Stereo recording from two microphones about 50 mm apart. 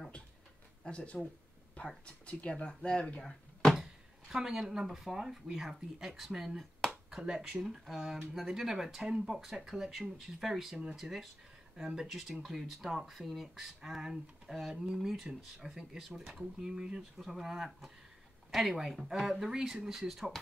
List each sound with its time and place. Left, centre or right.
0.8 s speech: left
4.3 s speech: centre
7.1 s a sound: centre
7.8 s speech: centre